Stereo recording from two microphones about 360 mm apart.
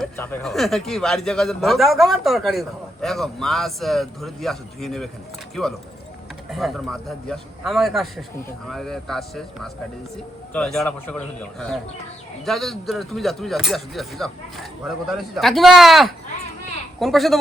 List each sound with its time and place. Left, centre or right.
0.0 s a man's voice: centre
6.5 s a man's voice: centre